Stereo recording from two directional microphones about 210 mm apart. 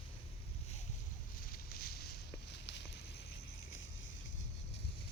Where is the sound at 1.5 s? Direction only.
45° left (ahead or behind).